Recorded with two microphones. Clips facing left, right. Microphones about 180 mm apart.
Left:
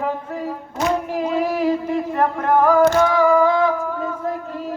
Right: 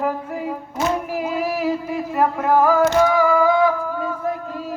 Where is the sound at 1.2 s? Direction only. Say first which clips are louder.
Left 2 dB; 5° right (ahead or behind).